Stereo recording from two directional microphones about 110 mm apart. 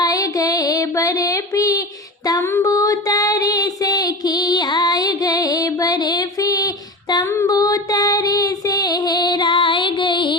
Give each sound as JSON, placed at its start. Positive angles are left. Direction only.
{"t": 0.0, "sound": "music", "side_deg": 35}
{"t": 2.4, "sound": "a sound", "side_deg": 25}
{"t": 7.3, "sound": "female singing", "side_deg": 30}